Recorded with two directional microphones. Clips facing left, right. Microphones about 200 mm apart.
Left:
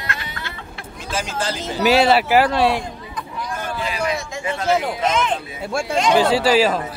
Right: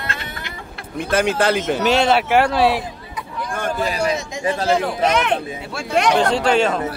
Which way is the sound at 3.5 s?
50° right (ahead or behind).